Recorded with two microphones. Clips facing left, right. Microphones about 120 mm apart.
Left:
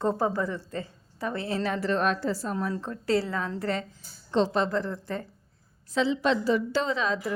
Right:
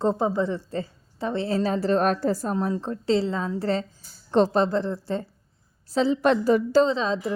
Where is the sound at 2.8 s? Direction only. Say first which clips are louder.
Right 3 dB; 25° right (ahead or behind).